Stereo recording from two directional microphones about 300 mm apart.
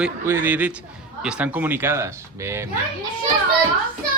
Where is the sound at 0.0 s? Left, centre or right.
Centre.